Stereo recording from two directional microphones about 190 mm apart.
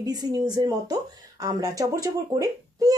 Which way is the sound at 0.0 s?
20° right (ahead or behind).